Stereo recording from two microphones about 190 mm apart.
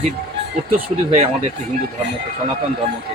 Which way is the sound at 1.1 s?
35° right (ahead or behind).